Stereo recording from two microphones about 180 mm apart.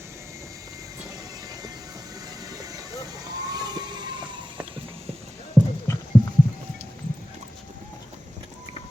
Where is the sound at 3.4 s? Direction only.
20° right (ahead or behind).